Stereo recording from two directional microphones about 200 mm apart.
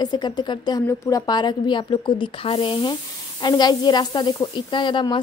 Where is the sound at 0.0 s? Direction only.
20° left (ahead or behind).